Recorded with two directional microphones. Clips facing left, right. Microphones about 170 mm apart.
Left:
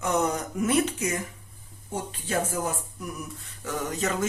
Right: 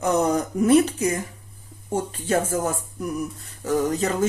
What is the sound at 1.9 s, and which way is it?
Speech, 45° right (ahead or behind).